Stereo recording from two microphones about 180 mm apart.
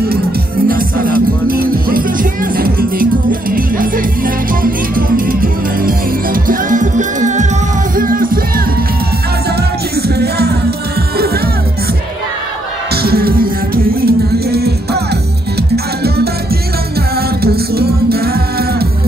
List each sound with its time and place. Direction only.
0.7 s music: 50° right (ahead or behind)
9.6 s music: 60° right (ahead or behind)
12.9 s music: 60° right (ahead or behind)
17.4 s music: 60° right (ahead or behind)